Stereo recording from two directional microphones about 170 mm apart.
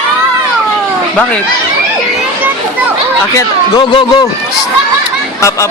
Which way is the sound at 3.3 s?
25° left (ahead or behind).